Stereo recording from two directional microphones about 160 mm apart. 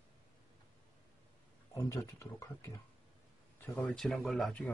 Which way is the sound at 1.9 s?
20° left (ahead or behind).